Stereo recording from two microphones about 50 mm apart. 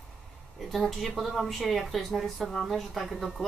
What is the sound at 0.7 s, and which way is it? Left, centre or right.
A woman's voice, centre.